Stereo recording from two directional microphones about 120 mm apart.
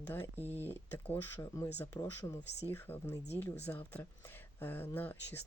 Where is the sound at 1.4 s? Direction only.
30° left (ahead or behind).